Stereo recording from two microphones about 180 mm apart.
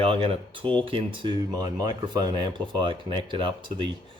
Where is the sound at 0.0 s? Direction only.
30° right (ahead or behind).